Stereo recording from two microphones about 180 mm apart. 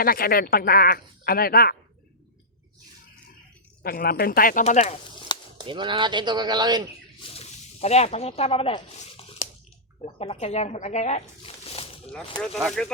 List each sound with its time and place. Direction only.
0.0 s speech: 55° left (ahead or behind)
3.8 s speech: 55° left (ahead or behind); by 4.9 s 40° left (ahead or behind)
5.5 s speech: 25° right (ahead or behind)
7.2 s speech: 35° left (ahead or behind)
12.6 s speech: 5° left (ahead or behind)